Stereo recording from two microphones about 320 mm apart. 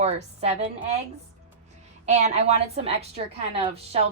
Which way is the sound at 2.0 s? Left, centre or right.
Right.